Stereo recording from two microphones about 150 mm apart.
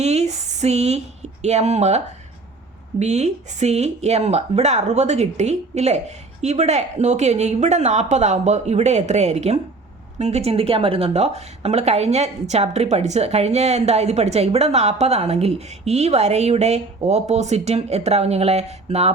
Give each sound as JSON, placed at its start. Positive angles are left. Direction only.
{"t": 0.0, "sound": "speech", "side_deg": -45}
{"t": 3.0, "sound": "a woman's voice", "side_deg": -50}